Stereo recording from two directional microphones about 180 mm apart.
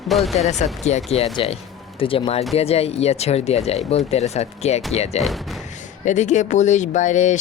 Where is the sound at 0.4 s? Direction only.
35° left (ahead or behind).